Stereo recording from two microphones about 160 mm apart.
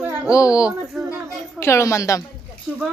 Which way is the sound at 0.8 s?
5° right (ahead or behind).